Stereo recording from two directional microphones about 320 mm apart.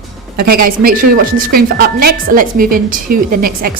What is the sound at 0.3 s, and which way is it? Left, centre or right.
A woman's voice, right.